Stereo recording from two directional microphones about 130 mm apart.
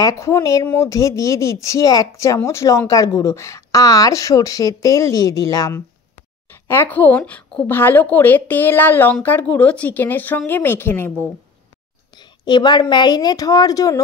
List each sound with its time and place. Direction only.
0.0 s speech: 25° left (ahead or behind)
6.7 s a woman's voice: 15° left (ahead or behind)
12.2 s a sound: 35° left (ahead or behind)
12.9 s speech: 35° left (ahead or behind)